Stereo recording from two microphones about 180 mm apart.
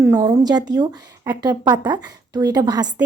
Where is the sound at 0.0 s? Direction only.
15° right (ahead or behind).